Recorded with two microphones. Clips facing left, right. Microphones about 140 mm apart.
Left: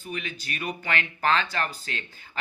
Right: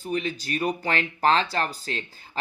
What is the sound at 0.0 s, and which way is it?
Speech, 35° right (ahead or behind).